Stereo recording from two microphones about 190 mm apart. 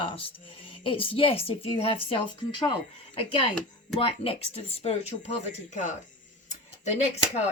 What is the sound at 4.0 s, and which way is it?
Speech, 30° left (ahead or behind).